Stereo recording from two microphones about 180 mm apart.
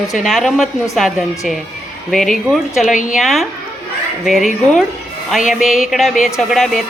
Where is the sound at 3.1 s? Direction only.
Centre (ahead or behind).